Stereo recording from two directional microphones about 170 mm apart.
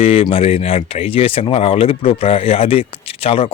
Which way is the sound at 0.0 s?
35° left (ahead or behind).